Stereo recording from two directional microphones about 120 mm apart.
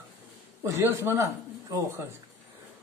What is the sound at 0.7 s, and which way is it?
A man's voice, 20° right (ahead or behind).